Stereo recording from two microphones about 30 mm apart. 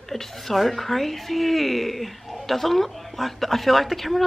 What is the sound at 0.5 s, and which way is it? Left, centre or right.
Speech, centre.